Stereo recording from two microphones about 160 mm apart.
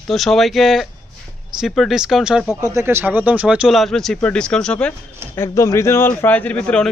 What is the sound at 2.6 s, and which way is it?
Speech, 15° right (ahead or behind).